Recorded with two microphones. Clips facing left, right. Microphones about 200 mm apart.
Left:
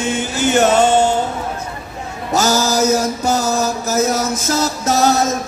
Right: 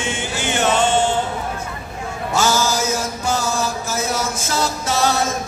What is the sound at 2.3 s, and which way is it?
Mantra, 40° left (ahead or behind).